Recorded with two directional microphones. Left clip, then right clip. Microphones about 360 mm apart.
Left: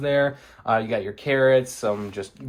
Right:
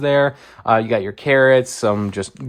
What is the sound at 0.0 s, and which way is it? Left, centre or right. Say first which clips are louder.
Speech: right 6 dB; centre.